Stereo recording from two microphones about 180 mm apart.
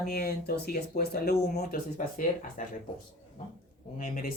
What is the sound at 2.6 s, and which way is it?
Speech, 45° left (ahead or behind).